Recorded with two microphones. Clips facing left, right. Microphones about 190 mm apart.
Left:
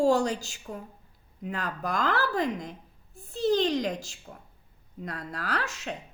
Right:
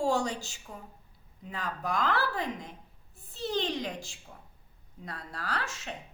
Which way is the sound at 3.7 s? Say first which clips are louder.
Left 6 dB; 40° left (ahead or behind).